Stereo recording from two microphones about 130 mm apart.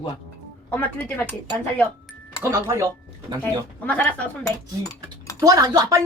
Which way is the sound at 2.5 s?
20° right (ahead or behind).